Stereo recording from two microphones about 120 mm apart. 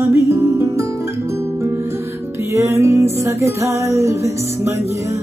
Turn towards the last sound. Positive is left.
turn(degrees=-25)  # may be behind; listen again after turning